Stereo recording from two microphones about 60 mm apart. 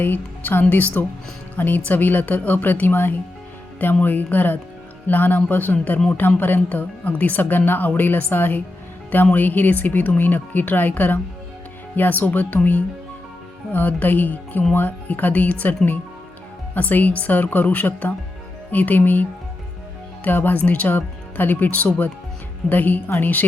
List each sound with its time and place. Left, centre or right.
0.0 s speech: left
16.7 s speech: left